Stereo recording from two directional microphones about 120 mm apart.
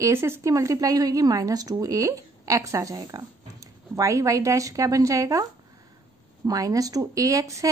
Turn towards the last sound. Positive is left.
turn(degrees=-25)  # may be behind; listen again after turning